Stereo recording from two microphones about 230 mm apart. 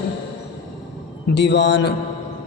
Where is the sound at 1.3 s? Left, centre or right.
Left.